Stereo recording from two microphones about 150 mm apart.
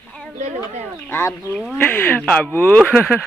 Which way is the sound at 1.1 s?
15° left (ahead or behind).